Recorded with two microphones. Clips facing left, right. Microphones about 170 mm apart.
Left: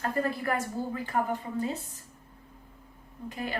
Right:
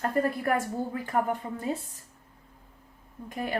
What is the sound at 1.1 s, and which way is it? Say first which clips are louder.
Speech: right 2 dB; 50° right (ahead or behind).